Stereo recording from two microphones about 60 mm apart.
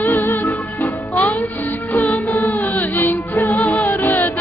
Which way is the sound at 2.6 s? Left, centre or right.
Left.